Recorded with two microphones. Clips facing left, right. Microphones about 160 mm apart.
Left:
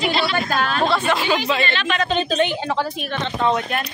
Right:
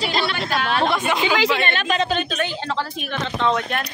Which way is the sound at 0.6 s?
40° left (ahead or behind).